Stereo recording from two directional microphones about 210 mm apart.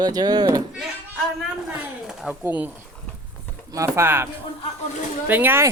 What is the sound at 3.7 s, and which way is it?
Speech, 15° right (ahead or behind).